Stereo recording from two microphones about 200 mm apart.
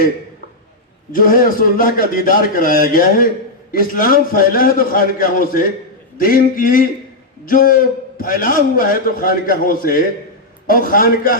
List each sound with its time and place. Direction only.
1.1 s a man's voice: 45° left (ahead or behind)